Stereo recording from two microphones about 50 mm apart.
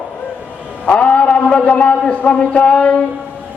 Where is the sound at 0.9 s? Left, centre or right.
Left.